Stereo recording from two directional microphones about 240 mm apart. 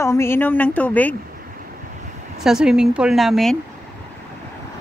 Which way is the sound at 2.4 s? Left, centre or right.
Centre.